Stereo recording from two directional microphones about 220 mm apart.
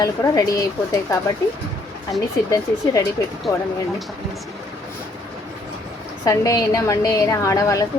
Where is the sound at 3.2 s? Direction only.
15° left (ahead or behind).